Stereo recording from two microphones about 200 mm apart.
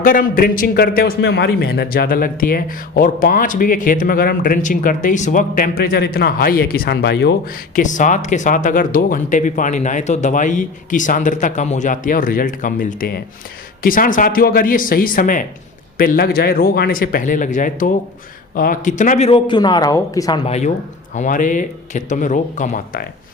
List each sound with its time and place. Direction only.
0.0 s a man's voice: 45° left (ahead or behind)
7.8 s a man's voice: 40° left (ahead or behind); by 20.4 s 15° left (ahead or behind)
20.4 s speech: 35° left (ahead or behind)